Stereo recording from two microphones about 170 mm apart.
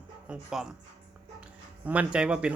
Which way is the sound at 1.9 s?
5° right (ahead or behind).